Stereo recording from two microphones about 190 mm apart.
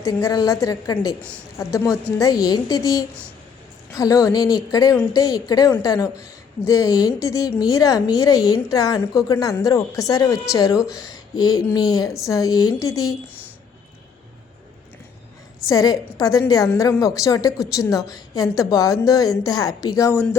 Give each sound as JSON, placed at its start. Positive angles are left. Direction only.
{"t": 0.0, "sound": "a woman's voice", "side_deg": 15}
{"t": 15.6, "sound": "a woman's voice", "side_deg": 20}